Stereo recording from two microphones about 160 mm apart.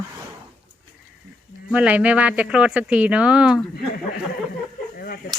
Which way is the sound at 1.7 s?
10° right (ahead or behind).